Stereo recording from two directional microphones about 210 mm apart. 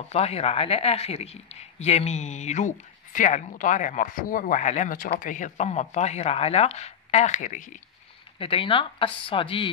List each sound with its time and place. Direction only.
0.1 s speech: 30° left (ahead or behind)
8.4 s speech: 25° left (ahead or behind)